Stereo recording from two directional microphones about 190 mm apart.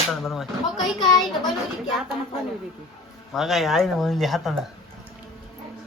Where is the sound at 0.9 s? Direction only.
20° left (ahead or behind).